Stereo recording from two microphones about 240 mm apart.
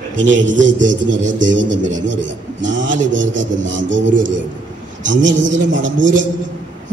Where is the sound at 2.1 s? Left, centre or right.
Right.